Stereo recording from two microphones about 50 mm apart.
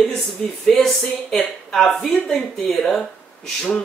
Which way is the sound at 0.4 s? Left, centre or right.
Centre.